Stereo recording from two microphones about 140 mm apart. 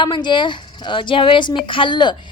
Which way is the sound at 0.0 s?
35° left (ahead or behind).